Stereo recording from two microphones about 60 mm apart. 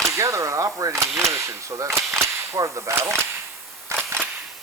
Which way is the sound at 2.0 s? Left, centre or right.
Right.